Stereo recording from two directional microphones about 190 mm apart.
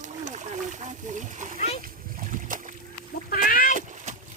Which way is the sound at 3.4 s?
45° left (ahead or behind).